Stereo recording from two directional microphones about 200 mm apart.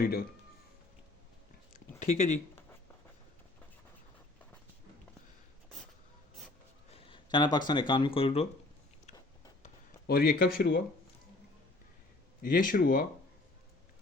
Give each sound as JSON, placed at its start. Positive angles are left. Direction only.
{"t": 0.0, "sound": "speech", "side_deg": 50}
{"t": 2.0, "sound": "a sound", "side_deg": 35}
{"t": 6.9, "sound": "speech", "side_deg": 25}
{"t": 9.6, "sound": "speech", "side_deg": 50}
{"t": 12.4, "sound": "speech", "side_deg": 45}